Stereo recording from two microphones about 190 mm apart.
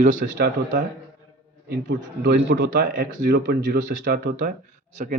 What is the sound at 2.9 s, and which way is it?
A man's voice, 70° right (ahead or behind).